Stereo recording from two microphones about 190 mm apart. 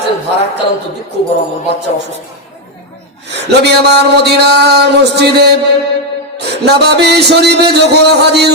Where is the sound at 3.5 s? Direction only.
60° right (ahead or behind).